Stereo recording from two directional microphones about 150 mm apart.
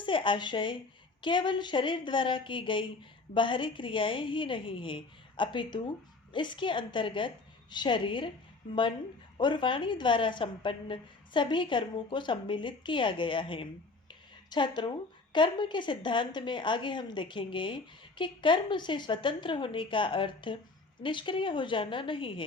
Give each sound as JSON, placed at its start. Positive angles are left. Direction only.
{"t": 0.0, "sound": "speech", "side_deg": 35}
{"t": 9.4, "sound": "speech", "side_deg": 30}